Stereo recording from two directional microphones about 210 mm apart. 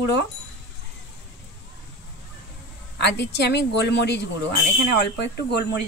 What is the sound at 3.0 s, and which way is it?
Speech, 55° left (ahead or behind).